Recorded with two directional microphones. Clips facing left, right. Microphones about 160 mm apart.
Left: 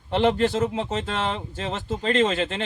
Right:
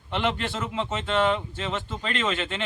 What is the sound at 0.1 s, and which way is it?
Speech, 40° left (ahead or behind).